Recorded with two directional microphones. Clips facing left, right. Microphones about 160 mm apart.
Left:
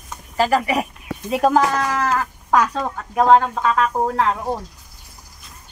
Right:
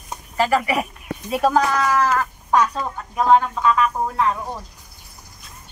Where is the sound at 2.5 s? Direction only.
90° left.